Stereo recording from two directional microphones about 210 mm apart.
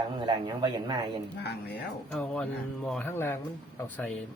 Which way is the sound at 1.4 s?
50° left (ahead or behind).